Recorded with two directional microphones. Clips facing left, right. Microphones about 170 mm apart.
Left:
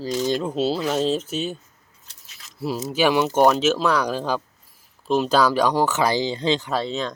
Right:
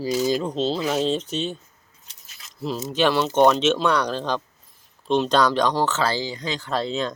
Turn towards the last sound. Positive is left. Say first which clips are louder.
# even
turn(degrees=0)  # may be behind; listen again after turning